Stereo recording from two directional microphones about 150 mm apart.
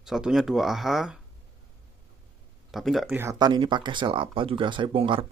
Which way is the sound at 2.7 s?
Centre (ahead or behind).